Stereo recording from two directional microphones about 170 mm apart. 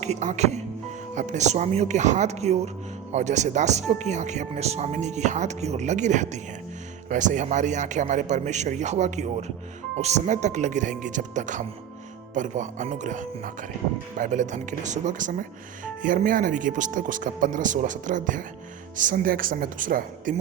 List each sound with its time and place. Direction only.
0.0 s speech: 45° right (ahead or behind)